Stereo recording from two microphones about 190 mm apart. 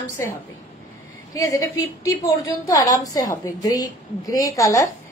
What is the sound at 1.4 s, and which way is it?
A woman's voice, 15° left (ahead or behind).